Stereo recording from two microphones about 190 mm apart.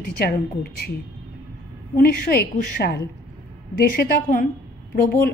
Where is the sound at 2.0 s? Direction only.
50° left (ahead or behind).